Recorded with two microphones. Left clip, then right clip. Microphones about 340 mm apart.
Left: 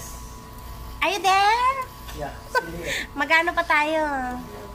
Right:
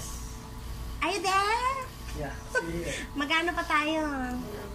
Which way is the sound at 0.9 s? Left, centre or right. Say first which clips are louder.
Left 7 dB; centre.